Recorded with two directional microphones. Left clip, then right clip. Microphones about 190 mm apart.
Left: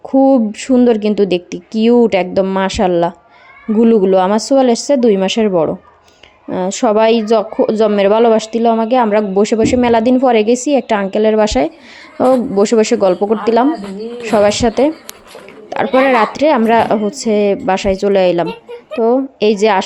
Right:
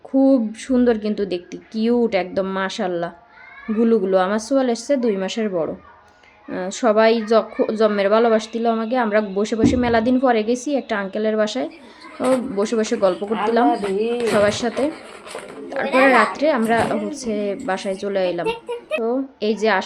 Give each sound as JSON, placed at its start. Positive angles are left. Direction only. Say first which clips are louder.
{"t": 0.0, "sound": "speech", "louder": "left 6 dB", "side_deg": 30}